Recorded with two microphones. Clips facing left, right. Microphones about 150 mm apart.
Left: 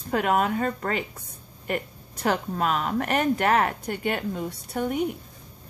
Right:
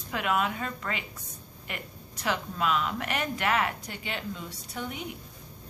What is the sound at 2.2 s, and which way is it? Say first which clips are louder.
A woman's voice: left 5 dB; 45° left (ahead or behind).